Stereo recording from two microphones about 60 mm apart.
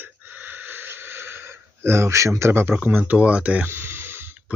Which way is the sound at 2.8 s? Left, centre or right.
Right.